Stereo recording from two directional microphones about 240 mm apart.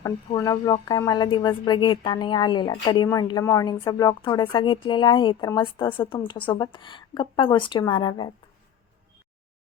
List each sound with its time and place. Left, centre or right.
0.0 s speech: centre